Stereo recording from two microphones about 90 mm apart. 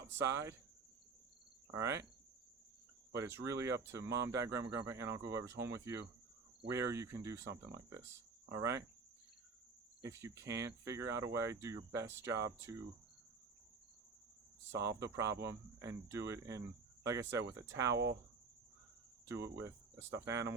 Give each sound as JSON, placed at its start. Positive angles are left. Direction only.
{"t": 0.1, "sound": "speech", "side_deg": -30}
{"t": 1.7, "sound": "speech", "side_deg": -35}
{"t": 3.1, "sound": "speech", "side_deg": -30}
{"t": 10.0, "sound": "speech", "side_deg": -30}
{"t": 14.7, "sound": "speech", "side_deg": -35}
{"t": 19.2, "sound": "speech", "side_deg": -30}